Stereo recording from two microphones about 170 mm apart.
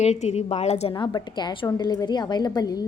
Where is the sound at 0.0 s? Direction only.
40° left (ahead or behind).